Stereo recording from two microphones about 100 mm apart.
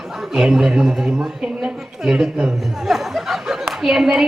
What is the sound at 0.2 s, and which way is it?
A woman's voice, 5° right (ahead or behind).